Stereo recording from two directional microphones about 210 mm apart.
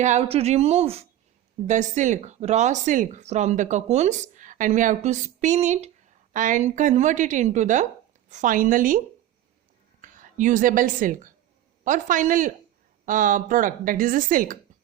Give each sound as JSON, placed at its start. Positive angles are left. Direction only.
{"t": 0.0, "sound": "speech", "side_deg": -30}
{"t": 10.0, "sound": "speech", "side_deg": -40}